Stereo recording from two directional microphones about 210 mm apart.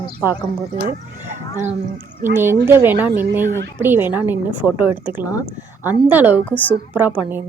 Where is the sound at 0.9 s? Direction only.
35° right (ahead or behind).